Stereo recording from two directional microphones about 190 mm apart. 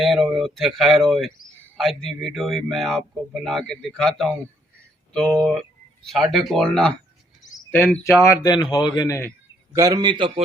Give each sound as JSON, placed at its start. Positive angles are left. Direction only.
{"t": 0.0, "sound": "speech", "side_deg": 0}
{"t": 7.4, "sound": "cricket", "side_deg": 40}
{"t": 8.2, "sound": "speech", "side_deg": 20}
{"t": 9.7, "sound": "a man's voice", "side_deg": -20}